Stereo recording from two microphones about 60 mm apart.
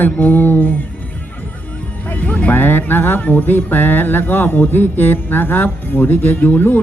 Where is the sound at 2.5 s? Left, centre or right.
Left.